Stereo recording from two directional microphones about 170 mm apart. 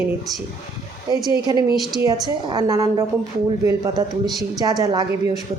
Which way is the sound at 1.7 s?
Centre (ahead or behind).